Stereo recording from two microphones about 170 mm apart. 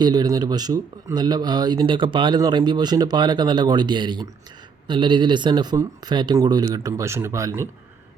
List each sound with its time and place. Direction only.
0.0 s speech: 25° right (ahead or behind)